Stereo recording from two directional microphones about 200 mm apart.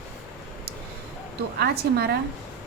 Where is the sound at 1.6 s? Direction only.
55° right (ahead or behind).